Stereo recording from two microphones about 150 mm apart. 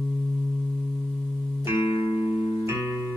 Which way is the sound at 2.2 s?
15° right (ahead or behind).